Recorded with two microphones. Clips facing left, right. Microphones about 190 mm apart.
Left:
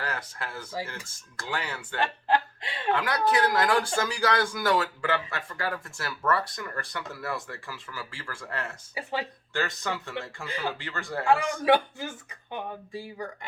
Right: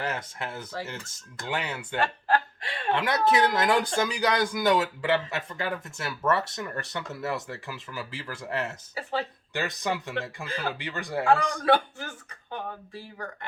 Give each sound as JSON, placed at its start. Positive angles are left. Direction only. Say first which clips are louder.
{"t": 0.0, "sound": "speech", "louder": "right 3 dB", "side_deg": -20}
{"t": 2.0, "sound": "speech", "louder": "even", "side_deg": 20}
{"t": 2.9, "sound": "speech", "louder": "right 2 dB", "side_deg": -20}
{"t": 10.4, "sound": "speech", "louder": "left 3 dB", "side_deg": 15}
{"t": 10.8, "sound": "speech", "louder": "right 3 dB", "side_deg": -15}
{"t": 11.3, "sound": "speech", "louder": "even", "side_deg": 15}